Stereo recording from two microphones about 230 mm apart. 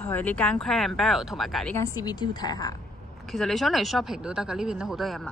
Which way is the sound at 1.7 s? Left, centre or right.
Centre.